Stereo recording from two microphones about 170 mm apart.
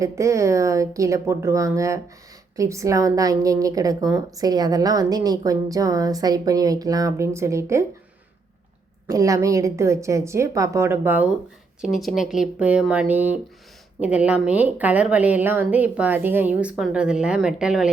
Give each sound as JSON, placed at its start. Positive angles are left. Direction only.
{"t": 0.0, "sound": "a woman's voice", "side_deg": -20}
{"t": 9.0, "sound": "a woman's voice", "side_deg": -20}